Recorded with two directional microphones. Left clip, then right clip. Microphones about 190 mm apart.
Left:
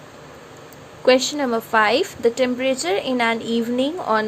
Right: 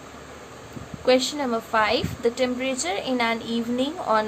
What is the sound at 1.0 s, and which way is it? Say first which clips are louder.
A woman's voice: left 4 dB; 35° left (ahead or behind).